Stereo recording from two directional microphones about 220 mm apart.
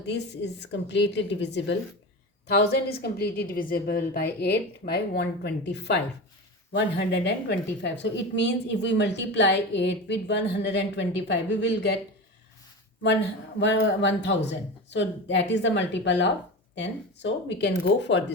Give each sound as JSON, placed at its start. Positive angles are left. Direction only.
{"t": 0.0, "sound": "a woman's voice", "side_deg": 50}
{"t": 13.6, "sound": "a woman's voice", "side_deg": 55}